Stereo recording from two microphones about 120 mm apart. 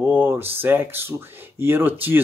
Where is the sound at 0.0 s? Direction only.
20° right (ahead or behind).